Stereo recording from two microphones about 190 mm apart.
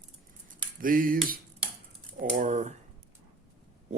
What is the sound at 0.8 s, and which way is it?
Speech, 45° right (ahead or behind).